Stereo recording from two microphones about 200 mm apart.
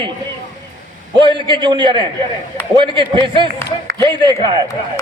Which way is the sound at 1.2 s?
25° right (ahead or behind).